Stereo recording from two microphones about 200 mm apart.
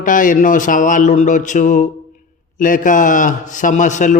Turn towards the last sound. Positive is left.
turn(degrees=35)  # may be behind; listen again after turning